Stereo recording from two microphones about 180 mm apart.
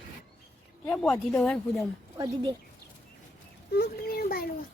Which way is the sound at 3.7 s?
60° left (ahead or behind).